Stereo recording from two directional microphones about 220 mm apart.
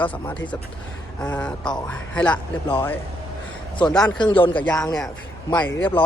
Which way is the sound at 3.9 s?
5° left (ahead or behind).